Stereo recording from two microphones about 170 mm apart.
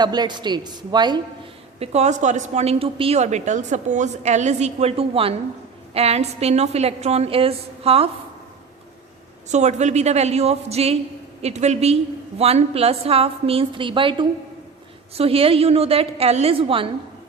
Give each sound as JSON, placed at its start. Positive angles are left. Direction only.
{"t": 0.0, "sound": "a woman's voice", "side_deg": -25}
{"t": 1.8, "sound": "a woman's voice", "side_deg": -40}
{"t": 9.5, "sound": "a woman's voice", "side_deg": -40}